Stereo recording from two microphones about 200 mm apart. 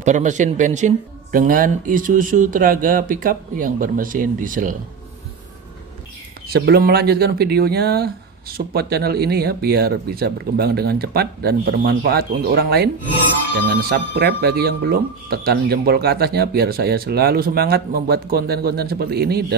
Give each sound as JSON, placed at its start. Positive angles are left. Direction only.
{"t": 0.0, "sound": "speech", "side_deg": -35}
{"t": 6.5, "sound": "speech", "side_deg": -50}